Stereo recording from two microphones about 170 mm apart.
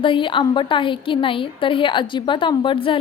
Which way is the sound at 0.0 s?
30° left (ahead or behind).